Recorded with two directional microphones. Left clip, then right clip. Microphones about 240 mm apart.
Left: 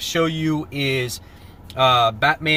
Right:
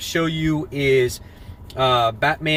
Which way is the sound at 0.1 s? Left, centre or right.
Centre.